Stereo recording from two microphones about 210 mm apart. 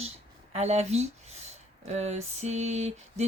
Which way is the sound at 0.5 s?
30° right (ahead or behind).